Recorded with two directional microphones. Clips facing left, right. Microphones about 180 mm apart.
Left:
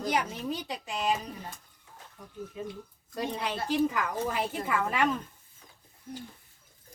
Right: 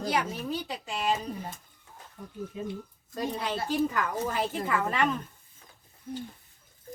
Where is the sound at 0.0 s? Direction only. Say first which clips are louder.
Even; 20° left (ahead or behind).